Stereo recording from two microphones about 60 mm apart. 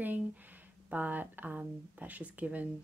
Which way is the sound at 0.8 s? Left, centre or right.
Right.